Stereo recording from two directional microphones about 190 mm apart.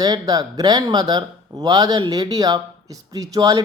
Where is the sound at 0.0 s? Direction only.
20° right (ahead or behind).